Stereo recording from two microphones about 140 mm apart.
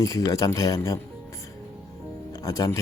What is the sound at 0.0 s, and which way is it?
Speech, 25° left (ahead or behind).